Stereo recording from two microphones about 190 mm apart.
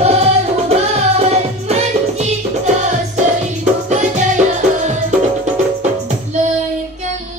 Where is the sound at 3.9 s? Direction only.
40° right (ahead or behind).